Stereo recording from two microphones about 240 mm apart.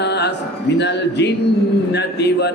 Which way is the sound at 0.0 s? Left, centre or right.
Left.